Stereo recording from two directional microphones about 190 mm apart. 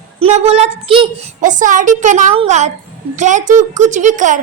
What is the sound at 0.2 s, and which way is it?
Speech, 35° right (ahead or behind).